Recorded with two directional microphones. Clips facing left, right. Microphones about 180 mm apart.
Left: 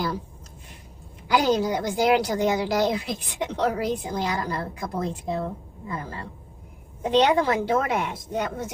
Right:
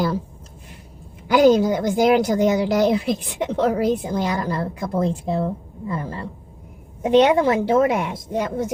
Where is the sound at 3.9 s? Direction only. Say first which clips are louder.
Right 5 dB; 25° right (ahead or behind).